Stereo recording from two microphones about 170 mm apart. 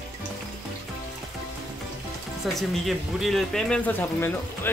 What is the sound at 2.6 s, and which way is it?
Speech, centre (ahead or behind).